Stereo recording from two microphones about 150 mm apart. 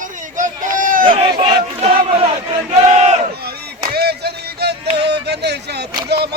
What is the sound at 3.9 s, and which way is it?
Music, 90° right.